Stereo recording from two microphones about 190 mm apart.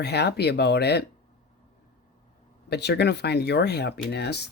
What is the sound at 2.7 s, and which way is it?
Speech, 60° left (ahead or behind).